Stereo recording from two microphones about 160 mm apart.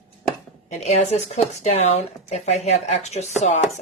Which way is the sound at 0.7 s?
45° left (ahead or behind).